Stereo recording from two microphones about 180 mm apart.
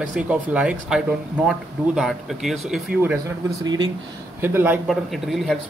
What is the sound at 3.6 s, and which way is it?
Speech, 25° right (ahead or behind).